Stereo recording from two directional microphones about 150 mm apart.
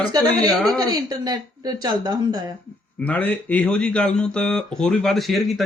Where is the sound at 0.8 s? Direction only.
25° right (ahead or behind).